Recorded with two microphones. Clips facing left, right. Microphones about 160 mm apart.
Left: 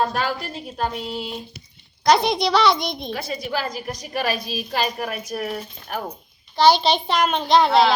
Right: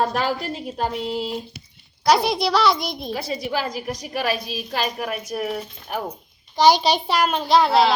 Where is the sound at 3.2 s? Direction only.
30° right (ahead or behind).